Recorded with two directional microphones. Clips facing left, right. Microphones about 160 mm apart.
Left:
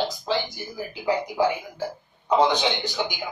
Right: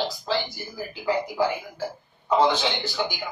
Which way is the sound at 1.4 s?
20° left (ahead or behind).